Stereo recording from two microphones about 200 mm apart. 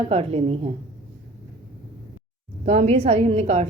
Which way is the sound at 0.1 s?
30° right (ahead or behind).